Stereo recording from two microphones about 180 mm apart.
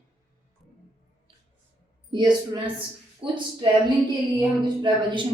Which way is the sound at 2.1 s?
25° right (ahead or behind).